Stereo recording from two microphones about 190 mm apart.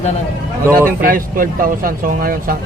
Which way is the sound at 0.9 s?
50° right (ahead or behind).